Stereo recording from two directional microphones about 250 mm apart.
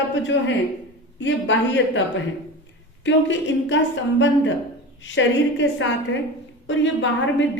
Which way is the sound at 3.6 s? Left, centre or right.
Left.